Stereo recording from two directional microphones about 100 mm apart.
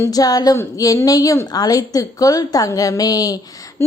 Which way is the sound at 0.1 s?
40° left (ahead or behind).